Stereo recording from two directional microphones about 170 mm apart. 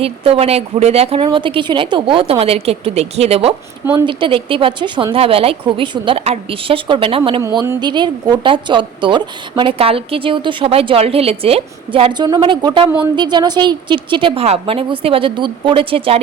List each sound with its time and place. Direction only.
0.0 s speech: 35° right (ahead or behind)
7.4 s a woman's voice: 20° right (ahead or behind)